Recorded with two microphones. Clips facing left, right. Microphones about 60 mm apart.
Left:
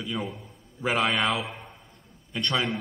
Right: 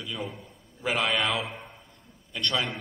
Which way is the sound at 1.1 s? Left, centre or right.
Centre.